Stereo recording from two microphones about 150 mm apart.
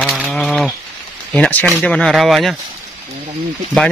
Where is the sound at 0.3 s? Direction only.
5° left (ahead or behind).